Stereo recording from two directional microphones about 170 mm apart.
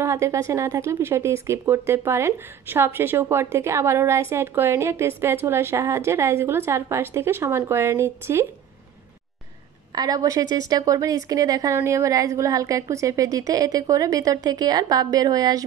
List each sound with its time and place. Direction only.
0.0 s speech: 15° right (ahead or behind)
9.9 s a woman's voice: 20° right (ahead or behind)